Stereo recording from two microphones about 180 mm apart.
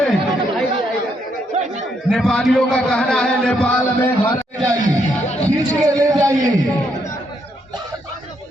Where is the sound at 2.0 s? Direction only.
Centre (ahead or behind).